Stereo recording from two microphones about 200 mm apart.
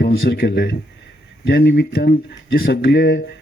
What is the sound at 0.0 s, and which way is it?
A man's voice, 50° left (ahead or behind).